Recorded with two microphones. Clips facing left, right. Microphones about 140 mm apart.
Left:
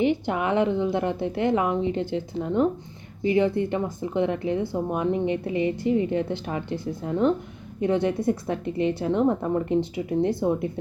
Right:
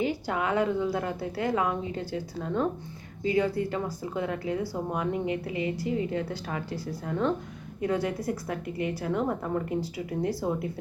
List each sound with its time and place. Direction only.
0.0 s a woman's voice: 20° left (ahead or behind)